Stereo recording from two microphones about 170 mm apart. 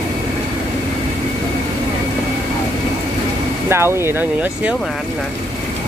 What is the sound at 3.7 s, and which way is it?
Speech, 15° right (ahead or behind).